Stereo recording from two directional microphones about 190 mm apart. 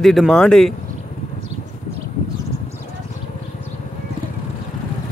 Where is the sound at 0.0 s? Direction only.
Centre (ahead or behind).